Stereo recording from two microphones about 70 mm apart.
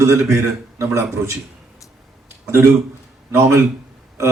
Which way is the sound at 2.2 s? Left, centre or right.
Right.